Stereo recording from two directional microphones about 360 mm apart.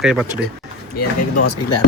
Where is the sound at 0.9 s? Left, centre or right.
Left.